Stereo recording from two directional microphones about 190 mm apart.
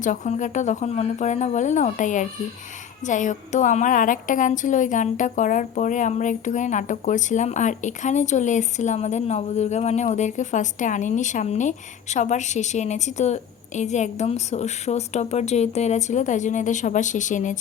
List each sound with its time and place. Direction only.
0.0 s a woman's voice: 40° left (ahead or behind)